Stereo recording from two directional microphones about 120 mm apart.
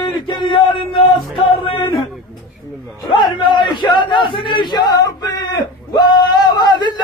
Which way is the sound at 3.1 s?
40° left (ahead or behind).